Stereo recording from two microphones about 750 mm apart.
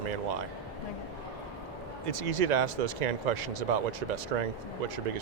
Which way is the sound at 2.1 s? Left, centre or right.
Right.